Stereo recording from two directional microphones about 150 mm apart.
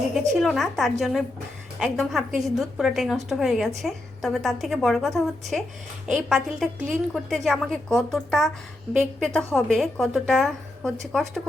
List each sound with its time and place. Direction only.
0.1 s a woman's voice: centre (ahead or behind)